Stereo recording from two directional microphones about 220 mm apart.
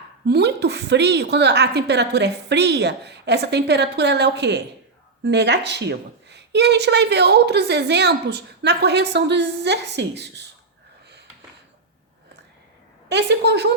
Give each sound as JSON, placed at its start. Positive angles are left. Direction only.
{"t": 0.3, "sound": "a woman's voice", "side_deg": -50}
{"t": 13.1, "sound": "a woman's voice", "side_deg": -50}